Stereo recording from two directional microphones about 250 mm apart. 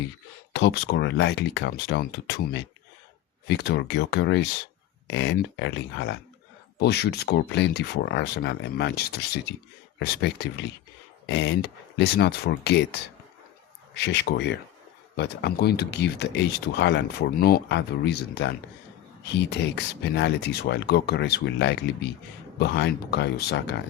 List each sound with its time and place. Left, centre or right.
0.5 s speech: left